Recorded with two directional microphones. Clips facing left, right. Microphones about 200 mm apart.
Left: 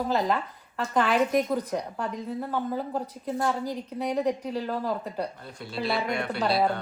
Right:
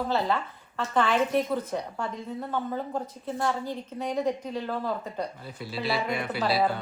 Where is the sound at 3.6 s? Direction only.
40° left (ahead or behind).